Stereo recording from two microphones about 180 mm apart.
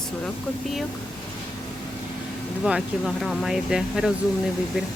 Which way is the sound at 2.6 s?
Centre (ahead or behind).